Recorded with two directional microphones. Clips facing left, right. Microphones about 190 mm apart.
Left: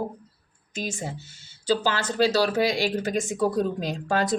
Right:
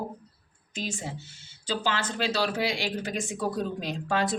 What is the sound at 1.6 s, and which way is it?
Speech, 40° left (ahead or behind).